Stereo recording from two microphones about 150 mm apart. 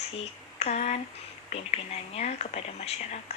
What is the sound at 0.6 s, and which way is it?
Speech, 45° left (ahead or behind).